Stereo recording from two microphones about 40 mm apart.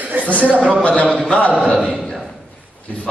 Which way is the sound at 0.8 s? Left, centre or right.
Left.